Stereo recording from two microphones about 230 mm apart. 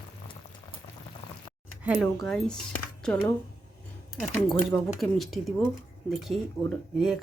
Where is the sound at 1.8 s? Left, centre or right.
Centre.